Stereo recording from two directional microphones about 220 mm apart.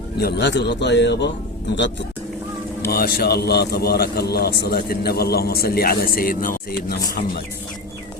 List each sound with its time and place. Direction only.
0.2 s a man's voice: 50° left (ahead or behind)
2.9 s a man's voice: 45° left (ahead or behind)